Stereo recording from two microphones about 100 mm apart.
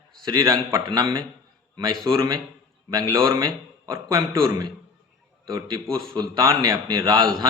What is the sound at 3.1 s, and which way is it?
Speech, 35° right (ahead or behind).